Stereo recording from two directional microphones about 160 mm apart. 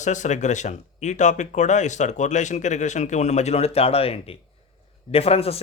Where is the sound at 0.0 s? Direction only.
50° left (ahead or behind).